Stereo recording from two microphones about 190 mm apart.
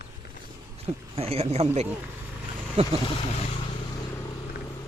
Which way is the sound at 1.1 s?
30° right (ahead or behind).